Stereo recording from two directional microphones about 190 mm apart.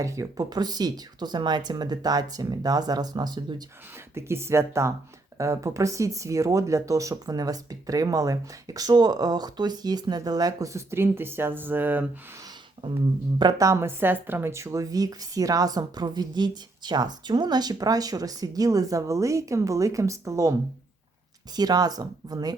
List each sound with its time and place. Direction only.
0.0 s speech: 15° right (ahead or behind)
13.4 s speech: 20° right (ahead or behind)